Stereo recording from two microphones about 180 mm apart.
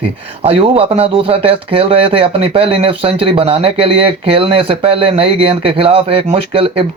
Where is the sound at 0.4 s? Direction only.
35° right (ahead or behind).